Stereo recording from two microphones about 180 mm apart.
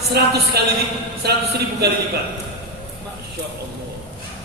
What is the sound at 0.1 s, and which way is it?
Speech, 65° right (ahead or behind).